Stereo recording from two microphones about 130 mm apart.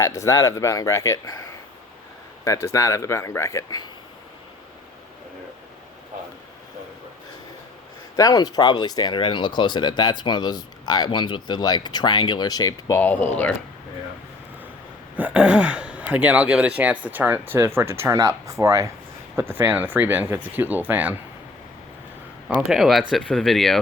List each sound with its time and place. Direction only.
0.0 s speech: 25° left (ahead or behind)
8.1 s speech: 25° left (ahead or behind)
15.1 s speech: 10° right (ahead or behind)
22.4 s speech: 5° right (ahead or behind)